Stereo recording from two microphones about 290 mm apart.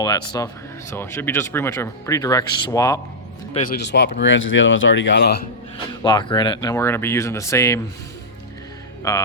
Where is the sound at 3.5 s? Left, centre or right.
Left.